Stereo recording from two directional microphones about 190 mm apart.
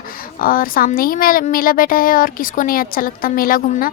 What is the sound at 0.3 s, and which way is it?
Speech, 50° left (ahead or behind).